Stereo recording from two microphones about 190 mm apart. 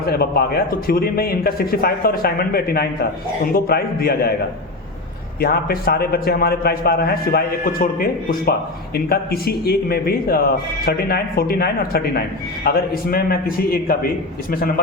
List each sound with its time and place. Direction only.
0.0 s a man's voice: 55° left (ahead or behind)
5.4 s a man's voice: 55° left (ahead or behind)